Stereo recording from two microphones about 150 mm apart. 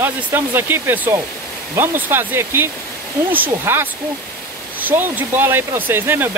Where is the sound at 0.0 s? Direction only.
15° right (ahead or behind).